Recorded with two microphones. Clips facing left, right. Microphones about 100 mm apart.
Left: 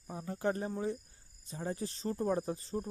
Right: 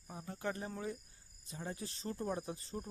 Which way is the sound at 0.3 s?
35° left (ahead or behind).